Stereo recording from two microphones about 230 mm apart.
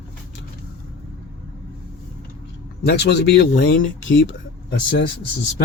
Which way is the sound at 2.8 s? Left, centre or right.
Left.